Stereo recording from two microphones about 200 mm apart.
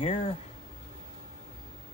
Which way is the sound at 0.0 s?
25° left (ahead or behind).